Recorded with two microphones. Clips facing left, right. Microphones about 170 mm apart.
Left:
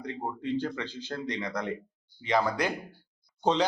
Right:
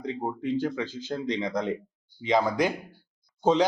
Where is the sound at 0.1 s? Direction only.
10° right (ahead or behind).